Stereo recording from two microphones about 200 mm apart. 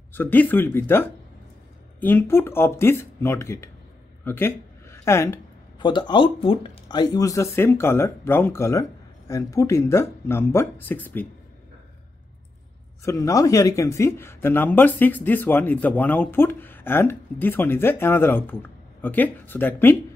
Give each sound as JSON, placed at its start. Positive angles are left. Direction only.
{"t": 0.1, "sound": "speech", "side_deg": 10}
{"t": 13.0, "sound": "speech", "side_deg": 15}